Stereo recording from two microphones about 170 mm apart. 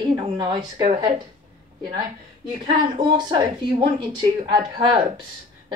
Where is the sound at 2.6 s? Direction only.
25° right (ahead or behind).